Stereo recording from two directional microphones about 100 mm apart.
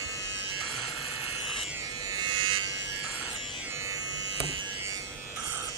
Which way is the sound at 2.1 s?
50° right (ahead or behind).